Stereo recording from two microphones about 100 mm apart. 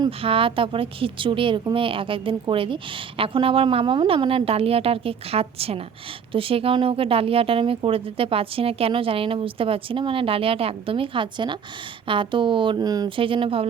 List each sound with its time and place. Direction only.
0.2 s a woman's voice: 65° right (ahead or behind)
12.8 s speech: 40° right (ahead or behind)
13.1 s speech: 60° right (ahead or behind)